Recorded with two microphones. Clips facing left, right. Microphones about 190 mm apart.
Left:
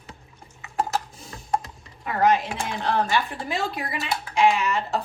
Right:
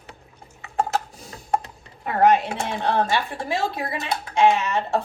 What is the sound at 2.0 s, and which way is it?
Speech, 35° right (ahead or behind).